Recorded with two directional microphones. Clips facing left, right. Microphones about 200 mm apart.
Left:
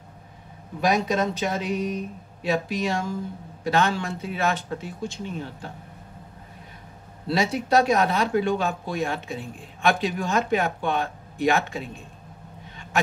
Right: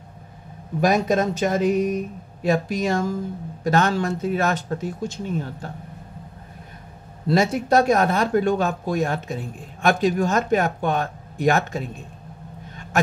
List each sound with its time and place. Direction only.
0.7 s speech: 50° right (ahead or behind)
7.2 s speech: 45° right (ahead or behind)